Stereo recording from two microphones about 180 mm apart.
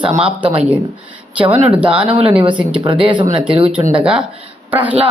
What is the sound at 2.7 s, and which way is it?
Speech, 25° right (ahead or behind).